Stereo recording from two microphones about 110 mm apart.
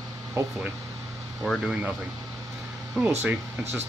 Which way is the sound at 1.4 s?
5° right (ahead or behind).